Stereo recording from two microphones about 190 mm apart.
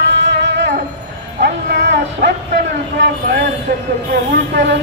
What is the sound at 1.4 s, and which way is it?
Bow-wow, 60° right (ahead or behind).